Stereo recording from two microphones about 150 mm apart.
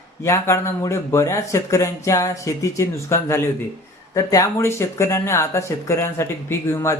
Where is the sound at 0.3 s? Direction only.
20° left (ahead or behind).